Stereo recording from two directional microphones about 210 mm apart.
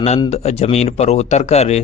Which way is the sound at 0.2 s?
30° left (ahead or behind).